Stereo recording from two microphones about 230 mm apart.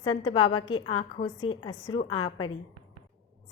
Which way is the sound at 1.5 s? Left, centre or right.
Centre.